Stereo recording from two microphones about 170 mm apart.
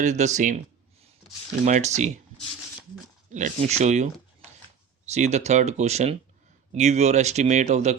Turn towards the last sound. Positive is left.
turn(degrees=-40)  # may be behind; listen again after turning